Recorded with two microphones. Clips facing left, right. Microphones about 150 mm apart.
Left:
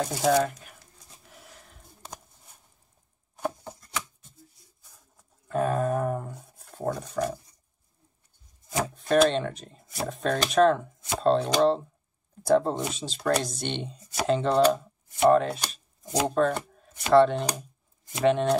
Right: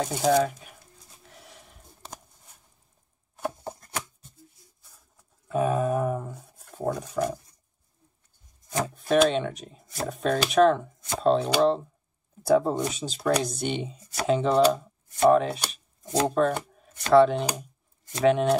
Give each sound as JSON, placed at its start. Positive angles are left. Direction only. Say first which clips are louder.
{"t": 0.0, "sound": "speech", "louder": "right 1 dB", "side_deg": 0}
{"t": 1.2, "sound": "a sound", "louder": "right 2 dB", "side_deg": 0}
{"t": 3.6, "sound": "shuffling cards", "louder": "right 2 dB", "side_deg": -50}
{"t": 5.5, "sound": "a sound", "louder": "right 1 dB", "side_deg": -5}
{"t": 6.7, "sound": "speech", "louder": "right 1 dB", "side_deg": 0}
{"t": 8.8, "sound": "speech", "louder": "even", "side_deg": 0}